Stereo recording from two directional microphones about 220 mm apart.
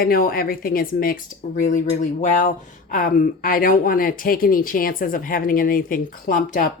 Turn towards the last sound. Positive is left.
turn(degrees=40)  # may be behind; listen again after turning